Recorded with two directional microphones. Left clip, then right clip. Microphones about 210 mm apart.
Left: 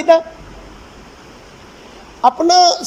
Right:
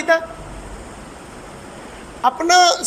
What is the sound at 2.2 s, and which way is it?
Speech, 20° left (ahead or behind).